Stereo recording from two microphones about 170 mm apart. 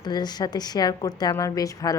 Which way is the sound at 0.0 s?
25° left (ahead or behind).